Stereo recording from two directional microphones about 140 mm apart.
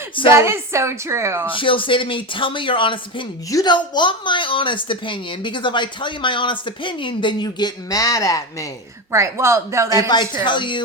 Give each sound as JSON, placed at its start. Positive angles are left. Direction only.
{"t": 0.3, "sound": "a woman's voice", "side_deg": -20}
{"t": 1.5, "sound": "a woman's voice", "side_deg": 40}
{"t": 9.1, "sound": "a woman's voice", "side_deg": -20}
{"t": 10.1, "sound": "a woman's voice", "side_deg": 35}